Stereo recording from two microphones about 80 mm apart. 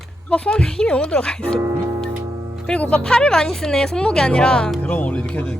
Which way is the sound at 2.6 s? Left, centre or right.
Centre.